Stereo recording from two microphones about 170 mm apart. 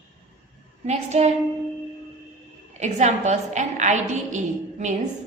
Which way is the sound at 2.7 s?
45° right (ahead or behind).